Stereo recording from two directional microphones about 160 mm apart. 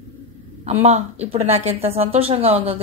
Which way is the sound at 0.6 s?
40° right (ahead or behind).